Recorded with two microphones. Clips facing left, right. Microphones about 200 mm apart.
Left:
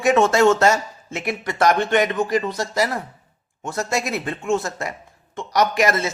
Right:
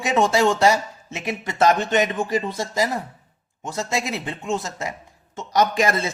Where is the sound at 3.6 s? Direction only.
15° right (ahead or behind).